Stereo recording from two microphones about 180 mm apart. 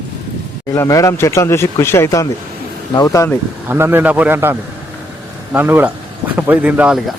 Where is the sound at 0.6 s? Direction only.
15° left (ahead or behind).